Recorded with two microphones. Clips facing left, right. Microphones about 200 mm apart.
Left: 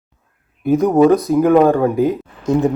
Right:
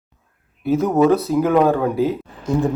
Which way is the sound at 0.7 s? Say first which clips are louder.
Left 4 dB; 15° left (ahead or behind).